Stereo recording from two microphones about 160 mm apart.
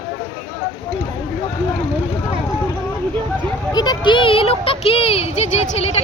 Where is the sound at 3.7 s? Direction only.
25° left (ahead or behind).